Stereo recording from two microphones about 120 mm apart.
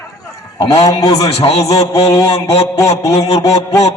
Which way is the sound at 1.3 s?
60° left (ahead or behind).